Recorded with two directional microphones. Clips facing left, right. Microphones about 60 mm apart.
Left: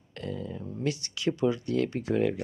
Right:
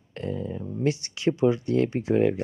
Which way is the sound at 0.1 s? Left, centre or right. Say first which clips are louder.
Right 5 dB; right.